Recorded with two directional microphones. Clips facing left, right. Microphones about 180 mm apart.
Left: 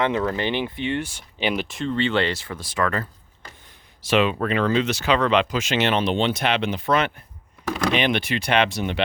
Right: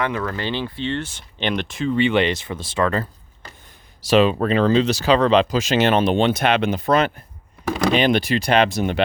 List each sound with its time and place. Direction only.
0.0 s speech: 25° left (ahead or behind); by 2.0 s centre (ahead or behind)
2.0 s speech: 15° right (ahead or behind); by 9.0 s 45° right (ahead or behind)